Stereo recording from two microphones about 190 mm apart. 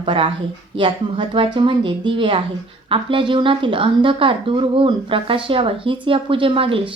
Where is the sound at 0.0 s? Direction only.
25° right (ahead or behind).